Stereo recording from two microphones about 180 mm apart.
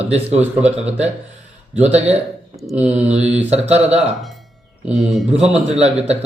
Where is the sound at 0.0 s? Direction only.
35° right (ahead or behind).